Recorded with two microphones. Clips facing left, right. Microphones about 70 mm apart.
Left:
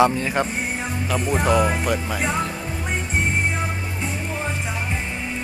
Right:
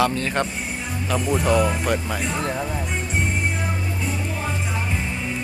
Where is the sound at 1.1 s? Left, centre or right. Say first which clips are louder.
Even; left.